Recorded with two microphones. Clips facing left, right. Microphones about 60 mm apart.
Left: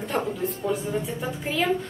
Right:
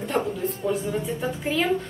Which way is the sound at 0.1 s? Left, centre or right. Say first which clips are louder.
Right 1 dB; centre.